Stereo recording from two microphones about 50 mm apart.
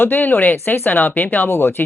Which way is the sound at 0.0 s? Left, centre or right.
Left.